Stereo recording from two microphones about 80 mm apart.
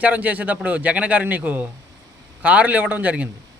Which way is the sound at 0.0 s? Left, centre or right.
Centre.